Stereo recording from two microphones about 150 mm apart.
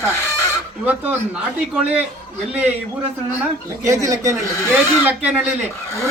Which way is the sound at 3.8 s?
20° right (ahead or behind).